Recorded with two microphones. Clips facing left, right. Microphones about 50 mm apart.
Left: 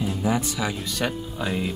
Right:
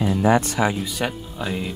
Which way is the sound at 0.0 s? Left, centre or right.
Right.